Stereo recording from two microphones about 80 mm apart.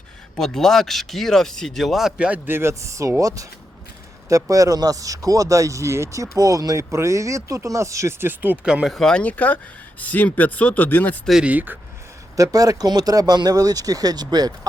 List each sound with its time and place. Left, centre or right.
0.3 s speech: centre
2.1 s speech: centre
2.5 s speech: right
8.2 s speech: right
8.6 s speech: centre
8.9 s speech: centre
9.2 s speech: centre
11.4 s speech: right
12.4 s speech: right